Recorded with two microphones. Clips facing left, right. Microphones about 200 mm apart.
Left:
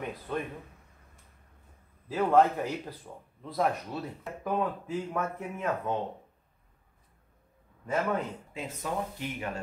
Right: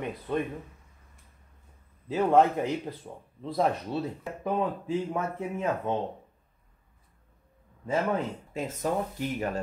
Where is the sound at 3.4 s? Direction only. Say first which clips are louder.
Right 2 dB; 30° right (ahead or behind).